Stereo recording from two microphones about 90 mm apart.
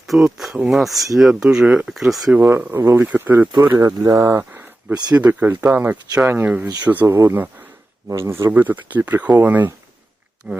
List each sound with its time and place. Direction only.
0.1 s speech: 5° right (ahead or behind)
1.9 s speech: 5° right (ahead or behind)
2.3 s speech: 20° right (ahead or behind)
3.8 s speech: 40° right (ahead or behind)
5.1 s speech: 15° right (ahead or behind)